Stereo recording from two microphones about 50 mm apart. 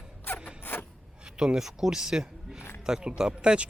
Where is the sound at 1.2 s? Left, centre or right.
Centre.